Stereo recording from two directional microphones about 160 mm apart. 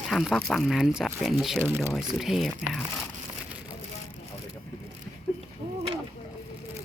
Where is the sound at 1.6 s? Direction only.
15° right (ahead or behind).